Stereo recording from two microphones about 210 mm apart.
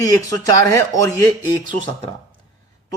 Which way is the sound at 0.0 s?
15° left (ahead or behind).